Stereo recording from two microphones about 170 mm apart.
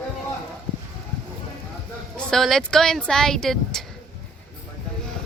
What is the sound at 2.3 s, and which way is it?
Speech, centre (ahead or behind).